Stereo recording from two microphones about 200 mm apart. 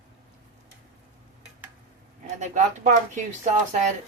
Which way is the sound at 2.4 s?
35° right (ahead or behind).